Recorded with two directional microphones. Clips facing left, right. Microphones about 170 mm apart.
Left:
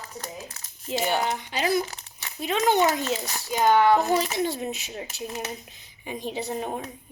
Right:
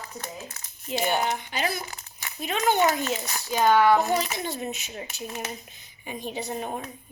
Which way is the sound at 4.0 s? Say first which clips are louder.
Left 2 dB; 30° left (ahead or behind).